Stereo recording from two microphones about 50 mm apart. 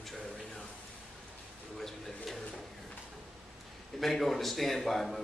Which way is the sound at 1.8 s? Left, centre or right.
Centre.